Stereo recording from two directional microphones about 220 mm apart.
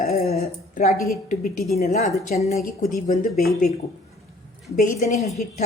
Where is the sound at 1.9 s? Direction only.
30° left (ahead or behind).